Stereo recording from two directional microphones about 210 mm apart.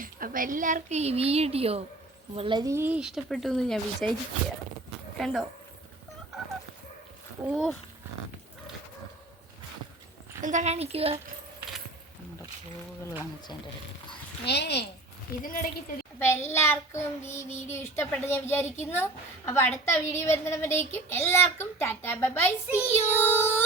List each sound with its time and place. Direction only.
0.0 s speech: 40° right (ahead or behind); by 4.1 s centre (ahead or behind)
5.1 s speech: centre (ahead or behind)
7.4 s speech: centre (ahead or behind)
10.4 s speech: 35° right (ahead or behind)
14.4 s speech: 55° left (ahead or behind)
15.4 s a woman's voice: 40° left (ahead or behind)
16.1 s a child's voice: 10° left (ahead or behind)